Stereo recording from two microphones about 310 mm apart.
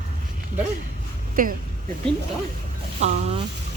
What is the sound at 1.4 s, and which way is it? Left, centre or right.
Speech, right.